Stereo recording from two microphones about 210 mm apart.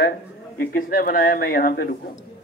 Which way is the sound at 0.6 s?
45° left (ahead or behind).